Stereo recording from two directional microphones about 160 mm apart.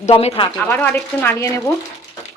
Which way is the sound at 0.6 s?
10° left (ahead or behind).